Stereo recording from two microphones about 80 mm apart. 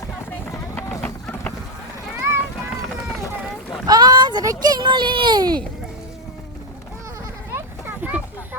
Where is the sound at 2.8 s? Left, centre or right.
Centre.